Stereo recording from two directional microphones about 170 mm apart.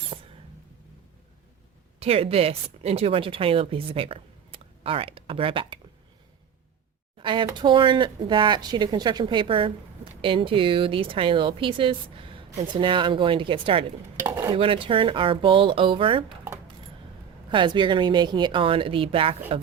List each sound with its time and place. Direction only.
0.1 s a sound: 30° right (ahead or behind)
2.0 s a woman's voice: 35° right (ahead or behind)
7.2 s speech: 30° right (ahead or behind)
17.5 s a woman's voice: 30° right (ahead or behind)